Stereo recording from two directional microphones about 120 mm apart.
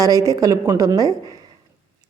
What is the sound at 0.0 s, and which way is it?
A woman's voice, 30° right (ahead or behind).